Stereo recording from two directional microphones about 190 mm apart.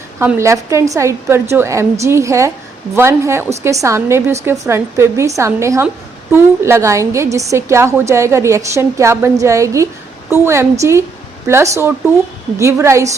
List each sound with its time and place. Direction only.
0.2 s a woman's voice: 10° right (ahead or behind)